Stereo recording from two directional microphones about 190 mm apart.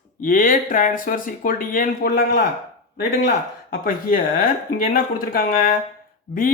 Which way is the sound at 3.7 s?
50° left (ahead or behind).